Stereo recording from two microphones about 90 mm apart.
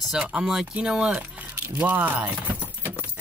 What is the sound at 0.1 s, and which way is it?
Speech, 10° right (ahead or behind).